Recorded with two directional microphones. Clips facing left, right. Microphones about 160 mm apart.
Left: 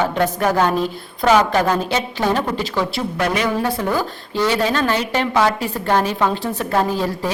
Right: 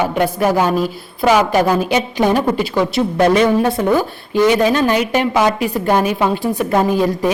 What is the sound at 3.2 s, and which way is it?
A woman's voice, 25° right (ahead or behind).